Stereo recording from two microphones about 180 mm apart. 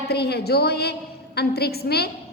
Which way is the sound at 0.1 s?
65° left (ahead or behind).